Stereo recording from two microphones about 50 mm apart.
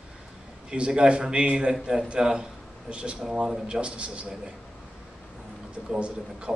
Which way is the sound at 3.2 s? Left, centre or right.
Centre.